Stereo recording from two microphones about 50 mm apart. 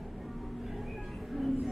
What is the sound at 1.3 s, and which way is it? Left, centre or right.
Train, centre.